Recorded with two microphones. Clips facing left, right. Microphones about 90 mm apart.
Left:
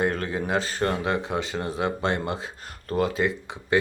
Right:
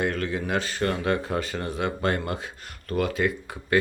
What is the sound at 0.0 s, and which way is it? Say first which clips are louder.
Speech: left 1 dB; 35° left (ahead or behind).